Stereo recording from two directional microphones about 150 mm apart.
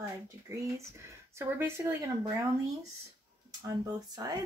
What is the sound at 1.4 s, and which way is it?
Speech, 15° right (ahead or behind).